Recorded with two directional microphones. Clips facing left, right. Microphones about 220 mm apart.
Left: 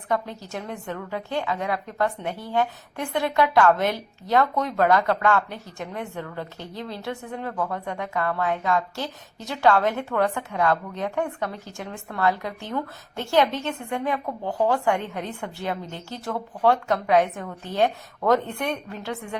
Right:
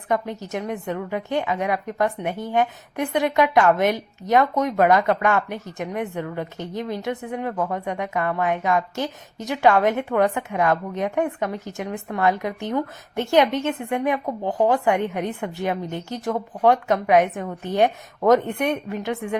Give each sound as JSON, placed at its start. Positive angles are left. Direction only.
{"t": 0.1, "sound": "a woman's voice", "side_deg": -20}